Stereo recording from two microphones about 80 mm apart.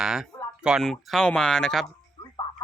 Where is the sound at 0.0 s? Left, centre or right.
Centre.